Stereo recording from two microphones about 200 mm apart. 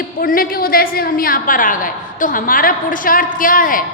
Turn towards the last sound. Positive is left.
turn(degrees=45)  # may be behind; listen again after turning